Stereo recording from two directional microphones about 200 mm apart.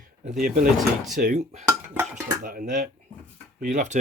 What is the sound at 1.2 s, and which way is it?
Speech, 40° right (ahead or behind).